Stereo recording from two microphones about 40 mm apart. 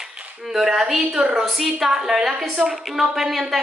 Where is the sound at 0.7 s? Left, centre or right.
Centre.